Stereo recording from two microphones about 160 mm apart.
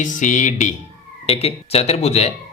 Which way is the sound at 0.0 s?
50° left (ahead or behind).